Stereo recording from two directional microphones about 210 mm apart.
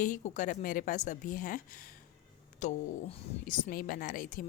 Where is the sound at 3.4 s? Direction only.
40° left (ahead or behind).